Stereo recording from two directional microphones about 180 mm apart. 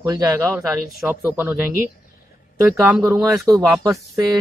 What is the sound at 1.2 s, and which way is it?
Speech, 15° right (ahead or behind).